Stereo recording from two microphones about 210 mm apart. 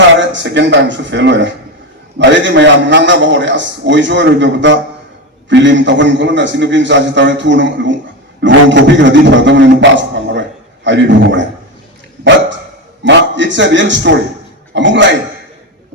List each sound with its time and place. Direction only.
0.2 s a man's voice: 60° right (ahead or behind)
13.1 s a man's voice: 60° right (ahead or behind)